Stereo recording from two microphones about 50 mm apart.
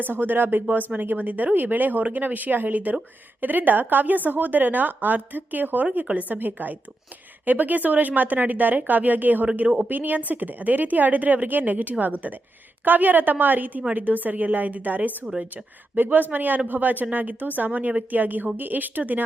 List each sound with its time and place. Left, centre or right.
0.0 s a woman's voice: right